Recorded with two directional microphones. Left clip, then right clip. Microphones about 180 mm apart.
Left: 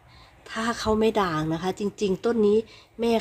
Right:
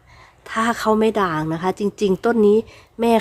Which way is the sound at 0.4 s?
20° right (ahead or behind).